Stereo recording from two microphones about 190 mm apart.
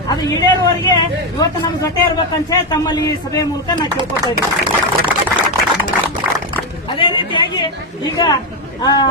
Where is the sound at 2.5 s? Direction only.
20° left (ahead or behind).